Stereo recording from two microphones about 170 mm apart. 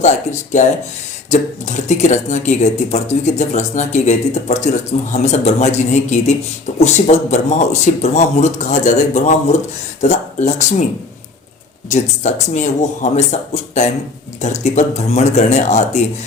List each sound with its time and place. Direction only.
0.0 s speech: 45° left (ahead or behind)
11.9 s speech: 45° left (ahead or behind)